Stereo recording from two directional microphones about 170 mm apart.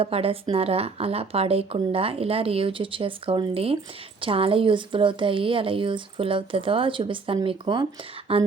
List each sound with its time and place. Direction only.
0.0 s speech: 35° right (ahead or behind)